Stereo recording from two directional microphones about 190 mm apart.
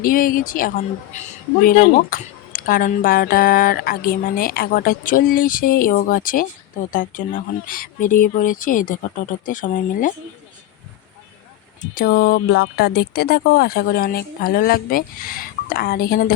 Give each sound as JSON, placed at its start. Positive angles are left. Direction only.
{"t": 0.0, "sound": "speech", "side_deg": 50}
{"t": 2.0, "sound": "speech", "side_deg": 50}
{"t": 11.9, "sound": "speech", "side_deg": 50}